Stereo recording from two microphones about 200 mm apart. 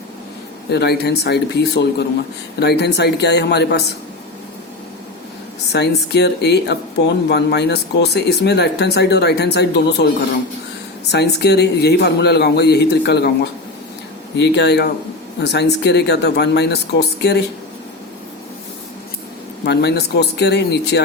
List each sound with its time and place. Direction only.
0.7 s speech: 55° left (ahead or behind)
5.7 s speech: 55° left (ahead or behind)
11.1 s speech: 55° left (ahead or behind)
19.6 s speech: 55° left (ahead or behind)